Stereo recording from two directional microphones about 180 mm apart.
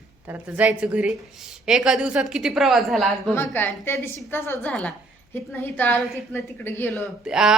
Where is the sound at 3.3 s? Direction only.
10° left (ahead or behind).